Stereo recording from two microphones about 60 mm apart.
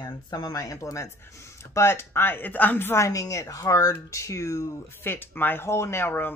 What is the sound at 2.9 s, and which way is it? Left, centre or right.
A woman's voice, left.